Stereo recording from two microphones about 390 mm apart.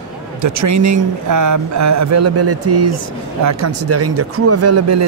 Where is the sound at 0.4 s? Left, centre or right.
Right.